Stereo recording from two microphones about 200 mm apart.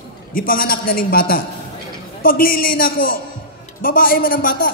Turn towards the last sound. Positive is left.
turn(degrees=45)  # may be behind; listen again after turning